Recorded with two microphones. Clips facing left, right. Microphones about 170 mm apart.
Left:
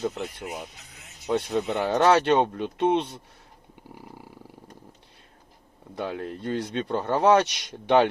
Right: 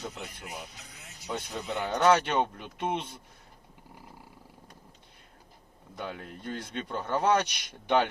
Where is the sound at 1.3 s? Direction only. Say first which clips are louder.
Left 9 dB; 65° left (ahead or behind).